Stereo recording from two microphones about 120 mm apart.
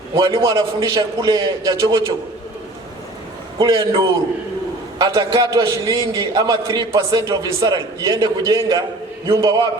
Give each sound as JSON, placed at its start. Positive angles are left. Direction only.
{"t": 0.3, "sound": "a man's voice", "side_deg": -25}
{"t": 3.6, "sound": "a man's voice", "side_deg": -30}